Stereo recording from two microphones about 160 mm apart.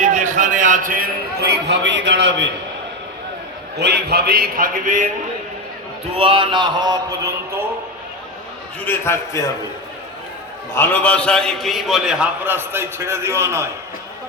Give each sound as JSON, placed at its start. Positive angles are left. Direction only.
{"t": 0.0, "sound": "a man's voice", "side_deg": -50}
{"t": 3.8, "sound": "a man's voice", "side_deg": -90}
{"t": 6.1, "sound": "mantra", "side_deg": -35}
{"t": 8.8, "sound": "a man's voice", "side_deg": 15}
{"t": 10.8, "sound": "a man's voice", "side_deg": 10}